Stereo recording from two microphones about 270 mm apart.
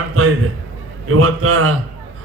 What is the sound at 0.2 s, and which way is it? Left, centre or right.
A man's voice, right.